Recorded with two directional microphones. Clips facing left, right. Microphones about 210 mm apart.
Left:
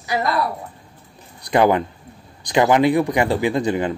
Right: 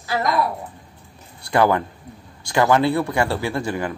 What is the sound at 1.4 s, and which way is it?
A man's voice, 20° left (ahead or behind).